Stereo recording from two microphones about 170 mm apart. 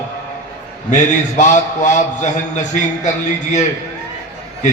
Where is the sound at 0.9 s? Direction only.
45° left (ahead or behind).